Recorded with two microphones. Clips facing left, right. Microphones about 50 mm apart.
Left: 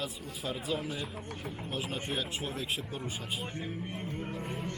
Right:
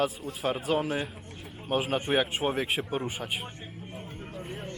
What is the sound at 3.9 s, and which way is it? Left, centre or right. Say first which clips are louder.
Music: left 2 dB; centre.